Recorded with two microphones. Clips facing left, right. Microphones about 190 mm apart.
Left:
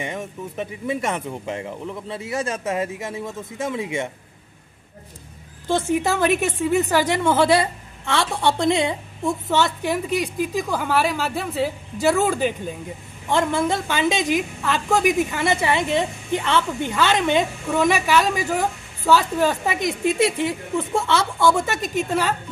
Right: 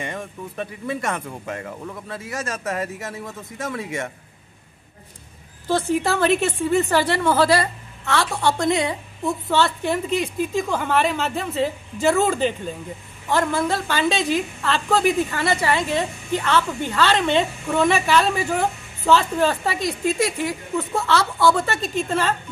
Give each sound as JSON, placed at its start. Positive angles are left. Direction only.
{"t": 0.0, "sound": "speech", "side_deg": 20}
{"t": 6.0, "sound": "a woman's voice", "side_deg": 15}
{"t": 13.5, "sound": "a woman's voice", "side_deg": 20}
{"t": 21.5, "sound": "a woman's voice", "side_deg": 10}